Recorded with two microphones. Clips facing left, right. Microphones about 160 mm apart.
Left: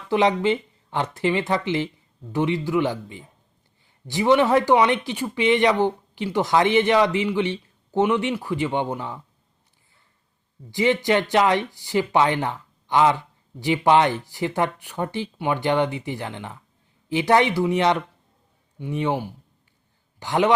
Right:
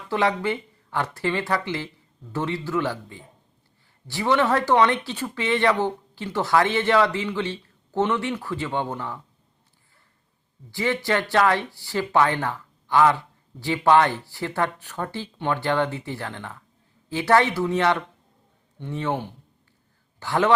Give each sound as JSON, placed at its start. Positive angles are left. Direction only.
{"t": 0.1, "sound": "speech", "side_deg": 20}
{"t": 10.7, "sound": "a man's voice", "side_deg": 20}